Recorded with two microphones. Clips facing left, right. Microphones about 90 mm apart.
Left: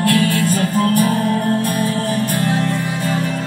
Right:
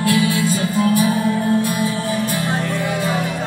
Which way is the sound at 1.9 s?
50° left (ahead or behind).